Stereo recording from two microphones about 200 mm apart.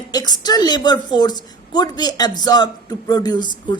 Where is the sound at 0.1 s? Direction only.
20° left (ahead or behind).